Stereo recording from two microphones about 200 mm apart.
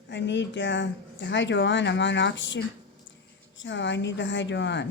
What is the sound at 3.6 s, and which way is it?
Speech, 65° left (ahead or behind).